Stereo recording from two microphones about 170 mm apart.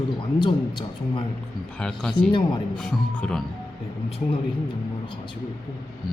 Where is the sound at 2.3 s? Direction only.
30° left (ahead or behind).